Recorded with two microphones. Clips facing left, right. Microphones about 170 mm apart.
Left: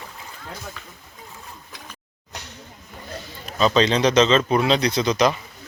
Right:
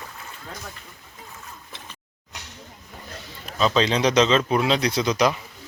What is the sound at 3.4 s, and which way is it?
A man's voice, centre (ahead or behind).